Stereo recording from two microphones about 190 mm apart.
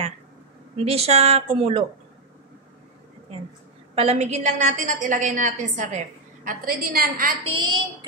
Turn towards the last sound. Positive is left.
turn(degrees=-25)  # may be behind; listen again after turning